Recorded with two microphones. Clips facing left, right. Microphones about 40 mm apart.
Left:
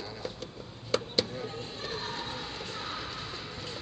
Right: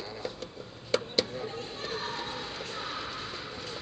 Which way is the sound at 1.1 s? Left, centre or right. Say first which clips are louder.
Right 1 dB; centre.